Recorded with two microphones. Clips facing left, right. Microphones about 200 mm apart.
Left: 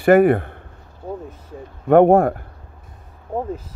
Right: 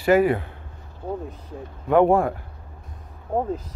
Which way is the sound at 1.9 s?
55° left (ahead or behind).